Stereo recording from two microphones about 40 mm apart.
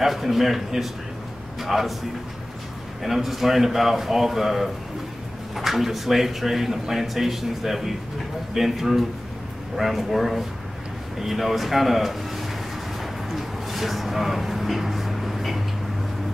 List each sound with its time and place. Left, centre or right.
0.0 s speech: centre
3.0 s speech: centre
13.3 s a sound: centre